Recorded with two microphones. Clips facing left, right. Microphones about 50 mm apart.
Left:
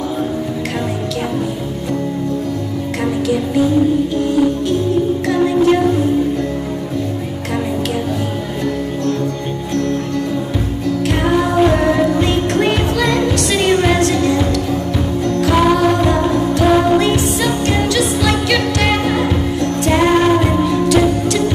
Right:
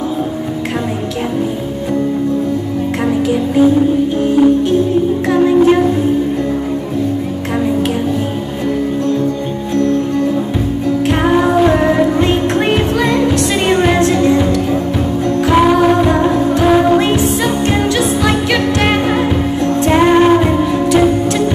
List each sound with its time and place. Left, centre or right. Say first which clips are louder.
3.3 s music: right 4 dB; centre
5.3 s music: right 4 dB; centre
11.1 s music: right 3 dB; centre